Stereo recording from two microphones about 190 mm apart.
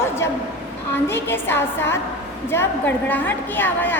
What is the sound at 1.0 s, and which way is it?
A woman's voice, 10° left (ahead or behind).